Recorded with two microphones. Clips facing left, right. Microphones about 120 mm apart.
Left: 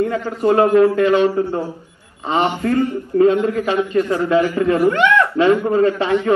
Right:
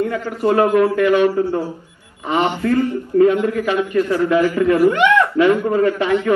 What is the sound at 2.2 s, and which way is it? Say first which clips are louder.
A man's voice: even; 35° left (ahead or behind).